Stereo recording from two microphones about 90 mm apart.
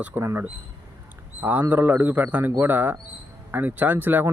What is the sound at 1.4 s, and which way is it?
Speech, 20° right (ahead or behind).